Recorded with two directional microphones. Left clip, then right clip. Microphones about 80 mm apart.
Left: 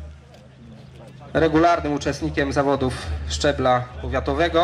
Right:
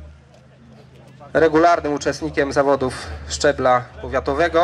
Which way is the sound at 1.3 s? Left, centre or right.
Right.